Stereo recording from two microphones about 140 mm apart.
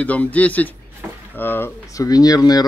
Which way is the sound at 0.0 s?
10° left (ahead or behind).